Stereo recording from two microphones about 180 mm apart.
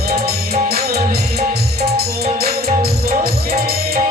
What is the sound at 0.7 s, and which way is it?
Music, 60° right (ahead or behind).